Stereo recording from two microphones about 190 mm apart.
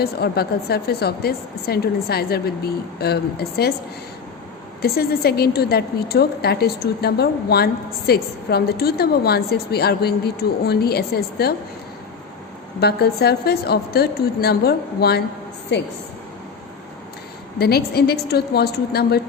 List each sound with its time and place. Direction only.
0.0 s a woman's voice: 55° left (ahead or behind)
4.8 s a woman's voice: 55° left (ahead or behind)
12.8 s a woman's voice: 55° left (ahead or behind)
17.6 s a woman's voice: 55° left (ahead or behind)